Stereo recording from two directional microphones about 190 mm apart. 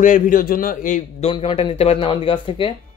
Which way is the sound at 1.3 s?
30° left (ahead or behind).